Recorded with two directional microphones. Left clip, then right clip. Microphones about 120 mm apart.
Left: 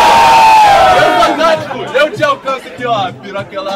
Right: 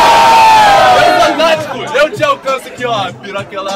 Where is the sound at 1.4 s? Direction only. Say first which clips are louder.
Even; 10° right (ahead or behind).